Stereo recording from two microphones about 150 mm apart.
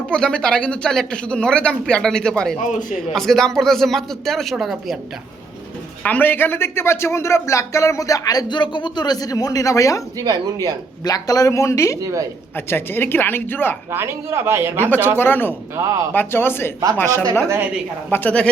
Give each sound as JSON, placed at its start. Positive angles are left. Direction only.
{"t": 0.1, "sound": "speech", "side_deg": 5}
{"t": 2.6, "sound": "a man's voice", "side_deg": 55}
{"t": 3.1, "sound": "speech", "side_deg": 0}
{"t": 6.0, "sound": "a man's voice", "side_deg": 10}
{"t": 10.2, "sound": "speech", "side_deg": -25}
{"t": 11.0, "sound": "a man's voice", "side_deg": 25}
{"t": 11.9, "sound": "speech", "side_deg": -20}
{"t": 12.5, "sound": "speech", "side_deg": 15}
{"t": 13.9, "sound": "a man's voice", "side_deg": -15}
{"t": 15.2, "sound": "speech", "side_deg": 15}
{"t": 15.7, "sound": "speech", "side_deg": -20}
{"t": 16.1, "sound": "speech", "side_deg": 15}